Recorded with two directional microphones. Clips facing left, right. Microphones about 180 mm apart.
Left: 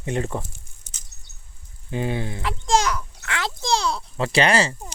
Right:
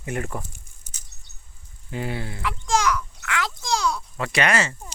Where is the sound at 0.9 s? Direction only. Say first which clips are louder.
Even; 10° right (ahead or behind).